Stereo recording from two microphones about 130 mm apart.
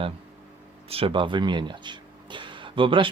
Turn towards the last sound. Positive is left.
turn(degrees=-40)  # may be behind; listen again after turning